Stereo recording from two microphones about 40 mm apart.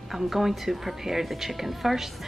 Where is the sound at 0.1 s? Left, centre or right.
Centre.